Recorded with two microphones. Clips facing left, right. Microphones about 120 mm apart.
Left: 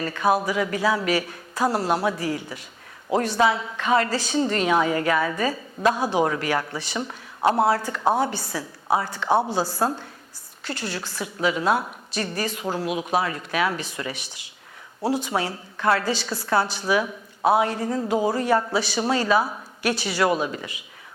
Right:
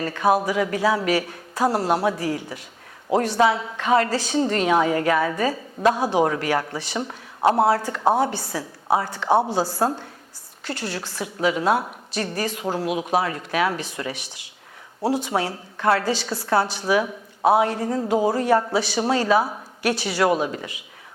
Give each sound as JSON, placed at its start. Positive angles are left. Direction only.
{"t": 0.0, "sound": "a woman's voice", "side_deg": -45}
{"t": 7.0, "sound": "a woman's voice", "side_deg": -35}
{"t": 9.3, "sound": "a woman's voice", "side_deg": -20}
{"t": 9.6, "sound": "a woman's voice", "side_deg": -30}
{"t": 10.7, "sound": "a woman's voice", "side_deg": -55}